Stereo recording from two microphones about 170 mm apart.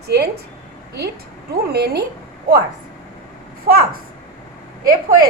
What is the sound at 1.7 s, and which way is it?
Speech, 70° right (ahead or behind).